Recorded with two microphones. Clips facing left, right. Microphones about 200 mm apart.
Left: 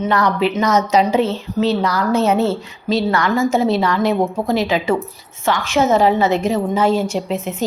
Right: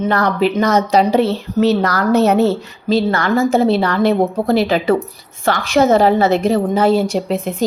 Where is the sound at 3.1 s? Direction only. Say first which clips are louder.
Right 2 dB; 35° right (ahead or behind).